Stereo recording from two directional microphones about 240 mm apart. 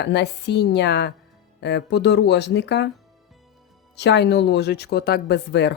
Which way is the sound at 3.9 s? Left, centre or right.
Left.